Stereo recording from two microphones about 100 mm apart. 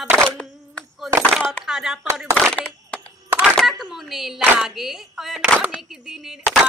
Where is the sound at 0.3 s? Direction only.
10° left (ahead or behind).